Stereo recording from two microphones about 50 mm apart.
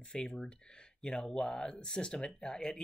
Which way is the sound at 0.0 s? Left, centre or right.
Centre.